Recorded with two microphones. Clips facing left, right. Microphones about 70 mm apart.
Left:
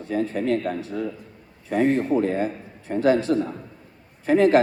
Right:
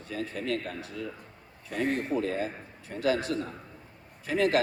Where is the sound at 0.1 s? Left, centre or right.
Left.